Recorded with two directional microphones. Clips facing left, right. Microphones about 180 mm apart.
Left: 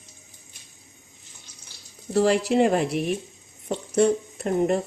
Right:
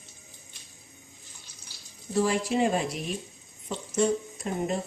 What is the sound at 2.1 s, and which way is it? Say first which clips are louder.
Speech: left 6 dB; 70° left (ahead or behind).